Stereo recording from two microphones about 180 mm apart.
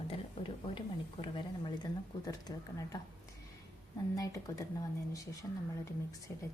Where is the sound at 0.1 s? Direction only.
30° left (ahead or behind).